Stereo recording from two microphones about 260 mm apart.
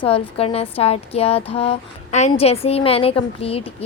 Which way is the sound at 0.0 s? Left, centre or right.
Left.